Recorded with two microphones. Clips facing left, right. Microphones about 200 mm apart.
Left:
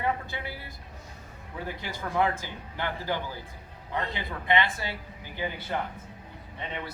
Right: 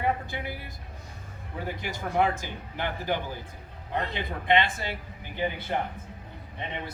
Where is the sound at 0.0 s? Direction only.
15° right (ahead or behind).